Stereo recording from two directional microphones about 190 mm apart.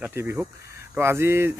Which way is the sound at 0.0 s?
10° right (ahead or behind).